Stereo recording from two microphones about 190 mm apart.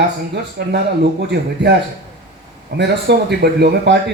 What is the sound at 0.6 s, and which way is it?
Speech, 60° right (ahead or behind).